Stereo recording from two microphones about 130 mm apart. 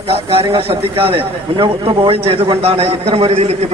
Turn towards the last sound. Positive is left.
turn(degrees=-50)  # may be behind; listen again after turning